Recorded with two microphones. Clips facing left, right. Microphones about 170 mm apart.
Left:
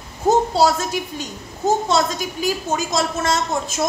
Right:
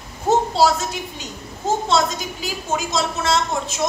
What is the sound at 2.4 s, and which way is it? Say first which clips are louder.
Speech: left 3 dB; 45° left (ahead or behind).